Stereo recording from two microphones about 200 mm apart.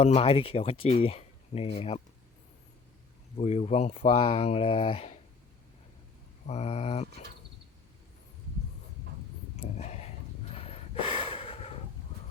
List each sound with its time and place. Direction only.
0.0 s speech: 30° left (ahead or behind)
3.3 s speech: 35° left (ahead or behind)
6.5 s speech: 30° left (ahead or behind)
9.6 s a sound: 30° left (ahead or behind)
10.5 s snort: 30° left (ahead or behind)